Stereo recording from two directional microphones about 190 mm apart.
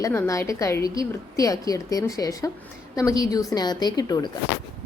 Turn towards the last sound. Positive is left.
turn(degrees=20)  # may be behind; listen again after turning